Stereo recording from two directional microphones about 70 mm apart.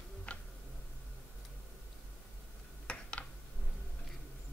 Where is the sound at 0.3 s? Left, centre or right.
Centre.